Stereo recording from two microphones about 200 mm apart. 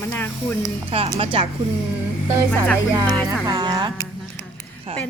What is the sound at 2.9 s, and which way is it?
Speech, 15° right (ahead or behind).